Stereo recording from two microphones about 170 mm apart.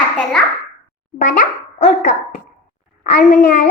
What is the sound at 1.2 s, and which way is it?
Speech, 50° left (ahead or behind).